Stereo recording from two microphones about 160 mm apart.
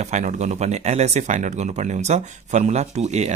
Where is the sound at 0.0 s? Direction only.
45° right (ahead or behind).